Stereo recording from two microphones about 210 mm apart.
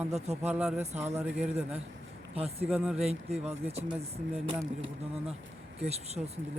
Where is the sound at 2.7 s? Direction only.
Centre (ahead or behind).